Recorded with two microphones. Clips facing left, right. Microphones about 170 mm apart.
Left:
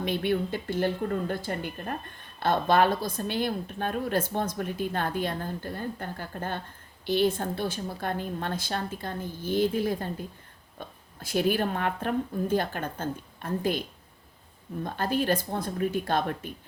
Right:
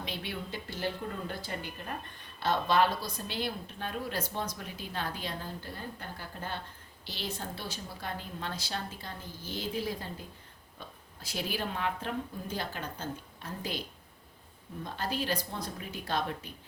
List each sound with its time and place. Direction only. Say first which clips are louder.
0.0 s speech: left 12 dB; 55° left (ahead or behind)
14.8 s speech: left 7 dB; 55° left (ahead or behind)